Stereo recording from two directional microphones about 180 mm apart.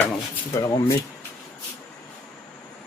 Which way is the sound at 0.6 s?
15° left (ahead or behind).